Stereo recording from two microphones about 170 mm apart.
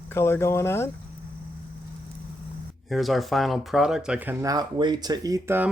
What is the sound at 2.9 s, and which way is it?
Speech, centre (ahead or behind).